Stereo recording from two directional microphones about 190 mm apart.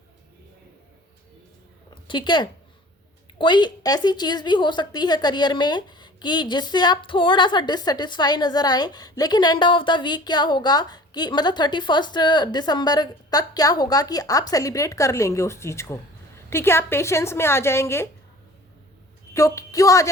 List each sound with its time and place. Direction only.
2.0 s a woman's voice: 25° left (ahead or behind)
19.3 s a woman's voice: 15° left (ahead or behind)